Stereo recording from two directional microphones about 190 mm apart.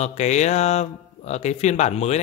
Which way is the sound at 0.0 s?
35° left (ahead or behind).